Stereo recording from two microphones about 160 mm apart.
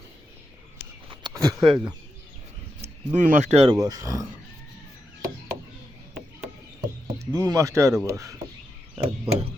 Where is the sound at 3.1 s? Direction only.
50° right (ahead or behind).